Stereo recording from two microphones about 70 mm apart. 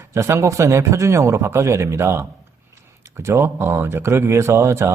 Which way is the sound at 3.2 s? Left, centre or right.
Right.